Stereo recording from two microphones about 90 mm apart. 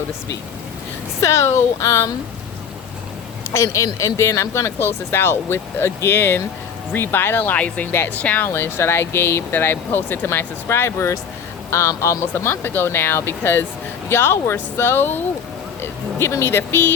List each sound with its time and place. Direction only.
1.2 s speech: 30° left (ahead or behind)
3.5 s speech: 35° left (ahead or behind)